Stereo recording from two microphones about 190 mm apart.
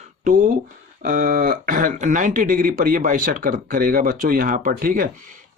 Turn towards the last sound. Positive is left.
turn(degrees=-45)  # may be behind; listen again after turning